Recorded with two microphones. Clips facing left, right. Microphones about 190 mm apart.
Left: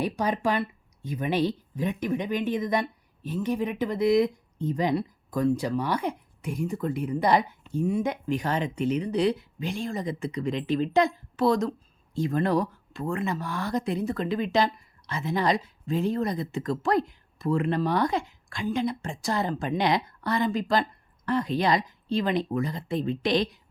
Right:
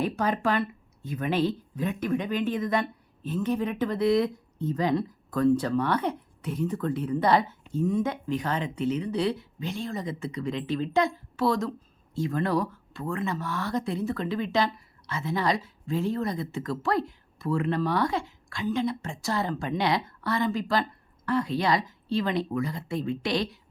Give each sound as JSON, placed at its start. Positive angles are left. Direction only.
{"t": 0.0, "sound": "speech", "side_deg": 15}
{"t": 13.0, "sound": "speech", "side_deg": 30}
{"t": 13.2, "sound": "speech", "side_deg": 15}